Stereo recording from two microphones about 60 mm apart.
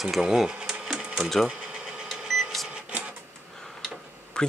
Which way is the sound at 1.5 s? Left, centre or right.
Centre.